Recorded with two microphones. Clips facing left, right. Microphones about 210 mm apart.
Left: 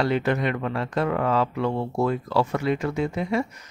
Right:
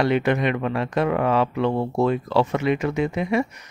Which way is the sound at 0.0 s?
20° right (ahead or behind).